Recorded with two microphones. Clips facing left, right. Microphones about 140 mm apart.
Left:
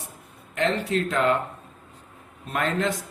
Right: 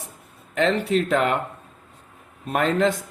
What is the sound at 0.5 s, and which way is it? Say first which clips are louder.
Speech: right 4 dB; 75° right (ahead or behind).